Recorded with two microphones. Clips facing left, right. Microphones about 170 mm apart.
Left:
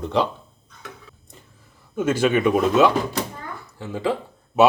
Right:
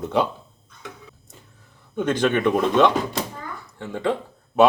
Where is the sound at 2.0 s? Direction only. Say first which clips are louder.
Left 1 dB; 5° left (ahead or behind).